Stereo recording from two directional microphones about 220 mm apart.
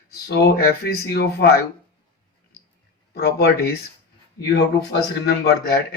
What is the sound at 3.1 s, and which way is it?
Speech, 45° left (ahead or behind).